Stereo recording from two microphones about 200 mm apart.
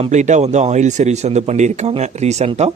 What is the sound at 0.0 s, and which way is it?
Speech, 35° right (ahead or behind).